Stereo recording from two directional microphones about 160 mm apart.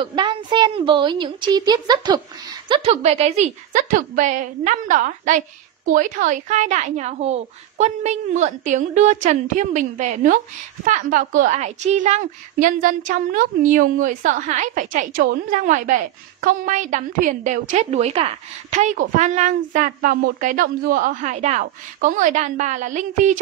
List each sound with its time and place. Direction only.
0.0 s a woman's voice: 30° right (ahead or behind)
2.7 s a woman's voice: 40° right (ahead or behind)